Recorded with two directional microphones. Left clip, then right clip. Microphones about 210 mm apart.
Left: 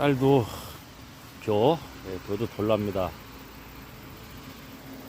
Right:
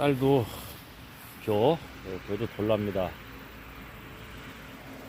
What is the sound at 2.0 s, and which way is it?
Speech, 55° left (ahead or behind).